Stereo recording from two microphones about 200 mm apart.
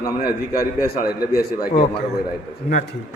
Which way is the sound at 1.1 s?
50° left (ahead or behind).